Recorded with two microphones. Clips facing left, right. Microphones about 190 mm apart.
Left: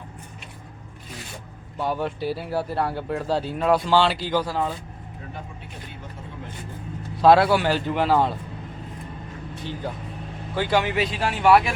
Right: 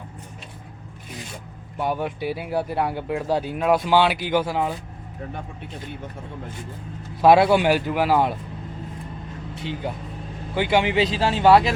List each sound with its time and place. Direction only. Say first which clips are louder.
1.8 s speech: right 1 dB; 15° right (ahead or behind)
7.2 s speech: right 1 dB; 15° right (ahead or behind)
10.5 s speech: right 2 dB; 15° right (ahead or behind)